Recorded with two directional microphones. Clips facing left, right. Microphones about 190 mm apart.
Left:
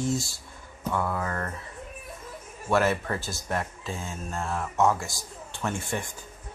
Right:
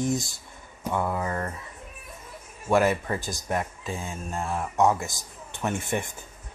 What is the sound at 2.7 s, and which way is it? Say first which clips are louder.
Speech: right 2 dB; 15° right (ahead or behind).